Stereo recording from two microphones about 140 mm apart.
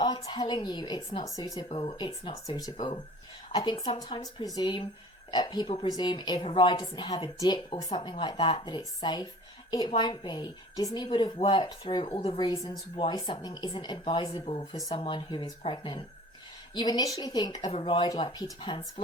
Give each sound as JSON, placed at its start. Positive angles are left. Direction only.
{"t": 0.0, "sound": "a woman's voice", "side_deg": 35}
{"t": 1.5, "sound": "a woman's voice", "side_deg": 40}
{"t": 2.5, "sound": "speech", "side_deg": 25}
{"t": 2.7, "sound": "a woman's voice", "side_deg": 40}
{"t": 17.7, "sound": "a woman's voice", "side_deg": 40}